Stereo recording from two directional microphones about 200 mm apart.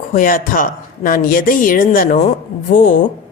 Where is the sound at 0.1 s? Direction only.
45° left (ahead or behind).